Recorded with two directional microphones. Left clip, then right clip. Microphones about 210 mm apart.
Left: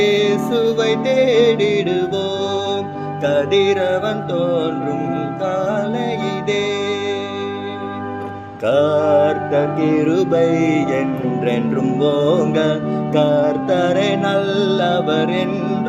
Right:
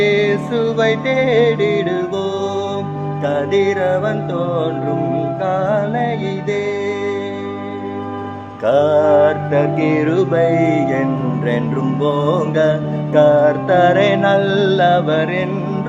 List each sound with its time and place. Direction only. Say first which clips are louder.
0.0 s music: right 1 dB; 20° left (ahead or behind)
8.6 s music: right 2 dB; 20° left (ahead or behind)